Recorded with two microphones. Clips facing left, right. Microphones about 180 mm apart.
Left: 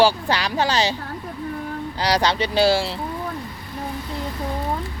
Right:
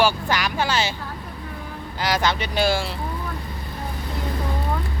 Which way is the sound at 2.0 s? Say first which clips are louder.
Left 2 dB; 35° left (ahead or behind).